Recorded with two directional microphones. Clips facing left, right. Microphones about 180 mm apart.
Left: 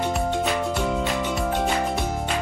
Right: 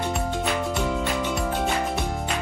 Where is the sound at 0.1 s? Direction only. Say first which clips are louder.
Left 2 dB; centre (ahead or behind).